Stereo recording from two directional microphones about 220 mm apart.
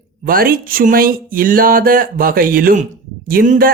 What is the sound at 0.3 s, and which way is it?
Speech, 40° right (ahead or behind).